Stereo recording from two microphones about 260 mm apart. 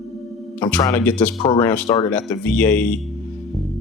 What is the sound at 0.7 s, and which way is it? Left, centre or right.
Speech, centre.